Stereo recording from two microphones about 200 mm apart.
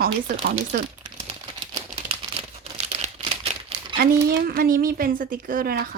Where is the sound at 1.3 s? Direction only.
25° right (ahead or behind).